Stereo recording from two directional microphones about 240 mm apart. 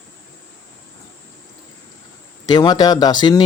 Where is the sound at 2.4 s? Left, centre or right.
Centre.